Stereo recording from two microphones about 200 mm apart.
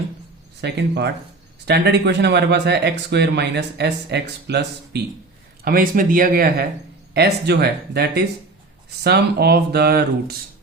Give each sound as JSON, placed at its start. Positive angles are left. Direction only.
{"t": 0.6, "sound": "speech", "side_deg": -60}
{"t": 5.6, "sound": "speech", "side_deg": -45}